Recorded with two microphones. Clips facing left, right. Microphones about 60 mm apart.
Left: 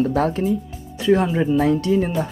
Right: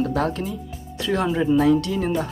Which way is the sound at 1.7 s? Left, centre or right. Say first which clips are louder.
Left 1 dB; left.